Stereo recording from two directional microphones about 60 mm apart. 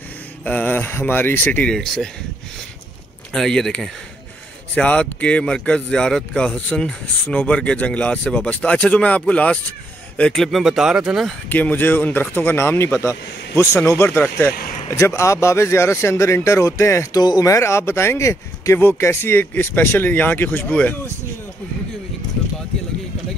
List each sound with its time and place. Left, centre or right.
0.5 s speech: left
1.7 s speech: centre
3.3 s speech: centre
4.7 s speech: left
10.3 s speech: centre
10.6 s speech: centre
11.4 s speech: left
12.5 s speech: left
13.8 s speech: left
14.9 s speech: left
17.1 s speech: left